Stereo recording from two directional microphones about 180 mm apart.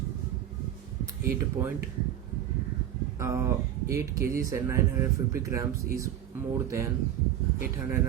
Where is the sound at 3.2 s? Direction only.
15° right (ahead or behind).